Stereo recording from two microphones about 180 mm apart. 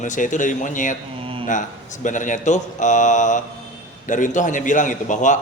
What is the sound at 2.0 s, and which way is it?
A man's voice, 45° left (ahead or behind).